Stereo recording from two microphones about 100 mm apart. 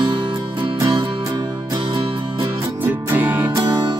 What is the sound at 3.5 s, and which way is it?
Music, 40° right (ahead or behind).